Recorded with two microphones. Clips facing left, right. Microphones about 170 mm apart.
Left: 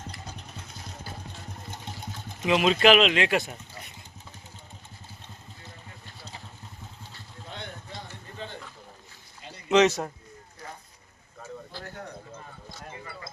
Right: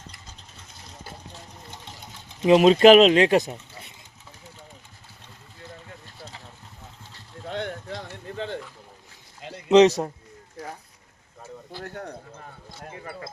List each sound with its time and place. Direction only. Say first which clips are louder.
0.3 s vehicle: left 6 dB; 60° left (ahead or behind)
2.5 s speech: right 7 dB; 40° right (ahead or behind)
7.4 s a sound: right 10 dB; 85° right
9.6 s speech: right 5 dB; 35° right (ahead or behind)
12.9 s speech: right 6 dB; 55° right (ahead or behind)